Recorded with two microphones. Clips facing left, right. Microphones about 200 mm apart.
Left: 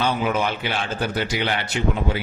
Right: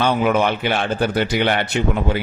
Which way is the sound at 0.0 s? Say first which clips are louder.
Right 5 dB; 60° right (ahead or behind).